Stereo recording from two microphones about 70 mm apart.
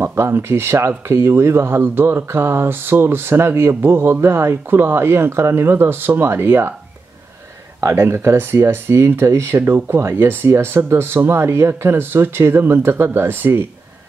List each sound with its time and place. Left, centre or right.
0.0 s speech: right
7.8 s speech: right